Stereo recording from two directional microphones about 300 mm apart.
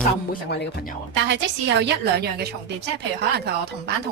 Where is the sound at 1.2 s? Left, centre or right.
Right.